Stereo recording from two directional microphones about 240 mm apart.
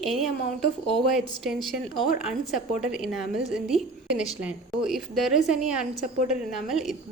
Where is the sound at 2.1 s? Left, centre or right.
Left.